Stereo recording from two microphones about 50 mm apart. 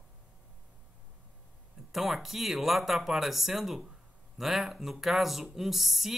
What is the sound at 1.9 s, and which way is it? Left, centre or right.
Speech, centre.